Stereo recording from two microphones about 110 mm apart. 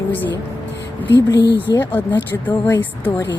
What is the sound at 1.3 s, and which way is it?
Speech, 40° left (ahead or behind).